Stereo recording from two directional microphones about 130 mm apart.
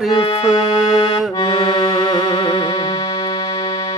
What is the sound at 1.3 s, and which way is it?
Music, 35° left (ahead or behind).